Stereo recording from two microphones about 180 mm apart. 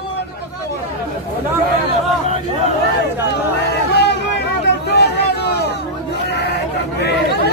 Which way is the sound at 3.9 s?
65° left (ahead or behind).